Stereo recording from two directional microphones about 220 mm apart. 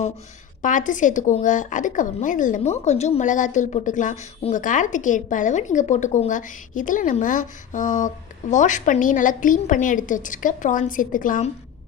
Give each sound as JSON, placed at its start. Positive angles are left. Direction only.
{"t": 0.6, "sound": "a woman's voice", "side_deg": 35}